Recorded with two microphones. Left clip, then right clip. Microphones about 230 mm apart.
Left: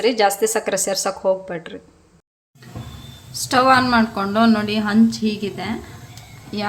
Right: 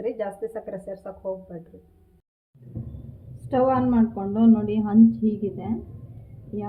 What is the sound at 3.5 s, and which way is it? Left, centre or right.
A woman's voice, left.